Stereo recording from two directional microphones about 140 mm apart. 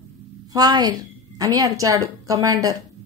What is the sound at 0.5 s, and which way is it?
A woman's voice, 30° right (ahead or behind).